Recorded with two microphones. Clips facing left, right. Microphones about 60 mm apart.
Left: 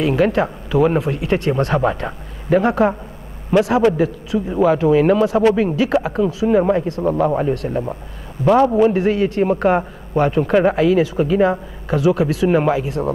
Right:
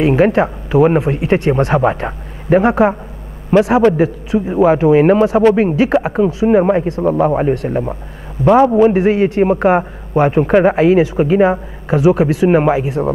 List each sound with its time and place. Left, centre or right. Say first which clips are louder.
0.0 s speech: right 4 dB; right
6.9 s a man's voice: right 4 dB; centre